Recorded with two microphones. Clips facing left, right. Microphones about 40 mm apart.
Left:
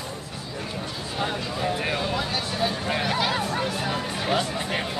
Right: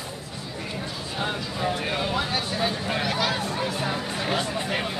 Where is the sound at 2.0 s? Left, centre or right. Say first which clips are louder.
Right 1 dB; centre.